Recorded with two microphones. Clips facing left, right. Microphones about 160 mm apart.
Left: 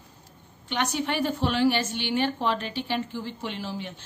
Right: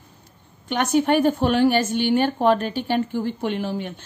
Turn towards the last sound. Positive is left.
turn(degrees=-55)  # may be behind; listen again after turning